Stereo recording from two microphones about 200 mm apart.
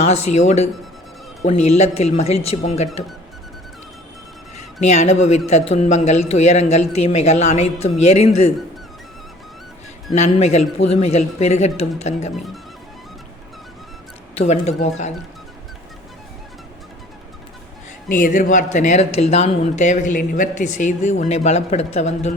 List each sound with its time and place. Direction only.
0.0 s speech: 35° left (ahead or behind)
4.8 s speech: 35° left (ahead or behind)
10.2 s speech: 35° left (ahead or behind)
14.3 s speech: 35° left (ahead or behind)
18.2 s speech: 40° left (ahead or behind)